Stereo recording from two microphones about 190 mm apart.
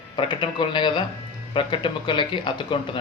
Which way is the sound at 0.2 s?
25° left (ahead or behind).